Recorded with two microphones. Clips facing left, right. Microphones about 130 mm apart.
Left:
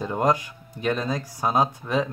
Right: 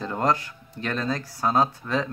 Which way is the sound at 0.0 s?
15° left (ahead or behind).